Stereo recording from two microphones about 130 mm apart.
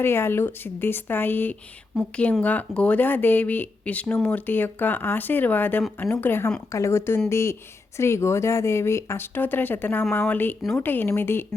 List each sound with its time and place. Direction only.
0.0 s a woman's voice: 20° left (ahead or behind)